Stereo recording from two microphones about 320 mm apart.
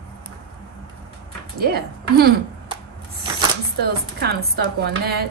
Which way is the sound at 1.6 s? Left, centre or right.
Right.